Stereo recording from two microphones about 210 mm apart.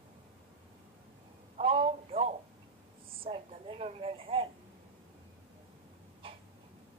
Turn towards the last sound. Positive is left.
turn(degrees=-25)  # may be behind; listen again after turning